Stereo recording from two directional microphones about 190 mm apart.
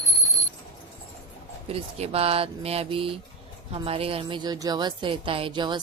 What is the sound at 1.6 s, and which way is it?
Speech, 30° right (ahead or behind).